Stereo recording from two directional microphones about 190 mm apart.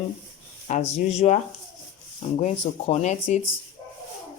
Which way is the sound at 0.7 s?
35° left (ahead or behind).